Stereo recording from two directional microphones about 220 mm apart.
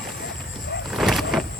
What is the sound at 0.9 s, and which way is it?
Vehicle, centre (ahead or behind).